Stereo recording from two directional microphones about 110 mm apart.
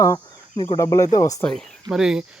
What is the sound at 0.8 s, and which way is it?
Speech, 30° left (ahead or behind).